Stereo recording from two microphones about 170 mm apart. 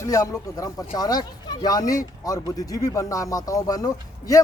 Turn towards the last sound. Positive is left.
turn(degrees=20)  # may be behind; listen again after turning